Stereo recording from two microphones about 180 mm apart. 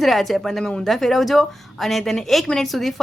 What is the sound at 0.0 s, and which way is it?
A woman's voice, centre (ahead or behind).